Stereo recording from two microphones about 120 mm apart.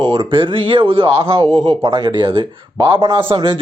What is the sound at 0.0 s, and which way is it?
A man's voice, 45° right (ahead or behind).